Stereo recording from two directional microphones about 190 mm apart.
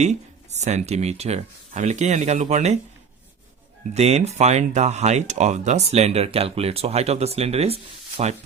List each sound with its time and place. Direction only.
0.0 s speech: 35° right (ahead or behind)
3.9 s speech: 35° right (ahead or behind)